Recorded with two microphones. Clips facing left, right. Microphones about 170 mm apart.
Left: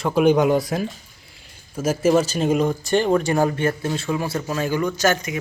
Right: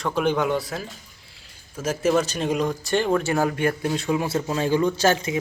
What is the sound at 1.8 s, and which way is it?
Speech, 5° left (ahead or behind).